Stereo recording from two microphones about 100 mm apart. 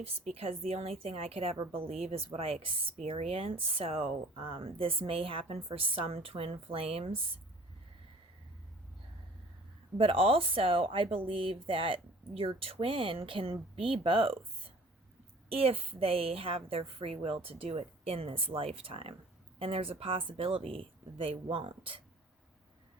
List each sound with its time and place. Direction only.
0.0 s a woman's voice: 85° right
1.7 s a woman's voice: 75° right (ahead or behind)
2.0 s a woman's voice: 90° right; by 7.2 s 70° right (ahead or behind)
10.0 s a woman's voice: 70° right (ahead or behind)
15.4 s a woman's voice: 75° right (ahead or behind)